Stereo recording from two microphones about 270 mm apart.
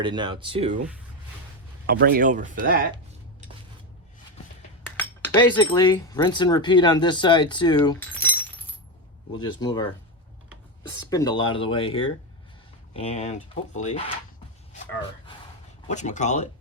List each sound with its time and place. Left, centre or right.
0.0 s speech: centre
1.9 s speech: right
4.9 s speech: centre
9.4 s speech: centre
11.1 s speech: centre
15.9 s speech: left